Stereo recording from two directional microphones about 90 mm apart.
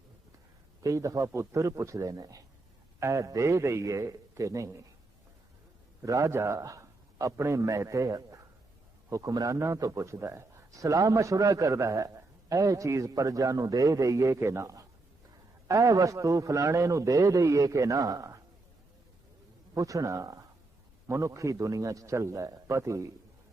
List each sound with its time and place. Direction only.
0.8 s speech: 40° right (ahead or behind)
6.0 s a man's voice: 35° right (ahead or behind)
19.7 s speech: 40° right (ahead or behind)